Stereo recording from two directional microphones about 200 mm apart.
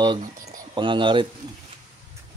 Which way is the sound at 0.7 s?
25° right (ahead or behind).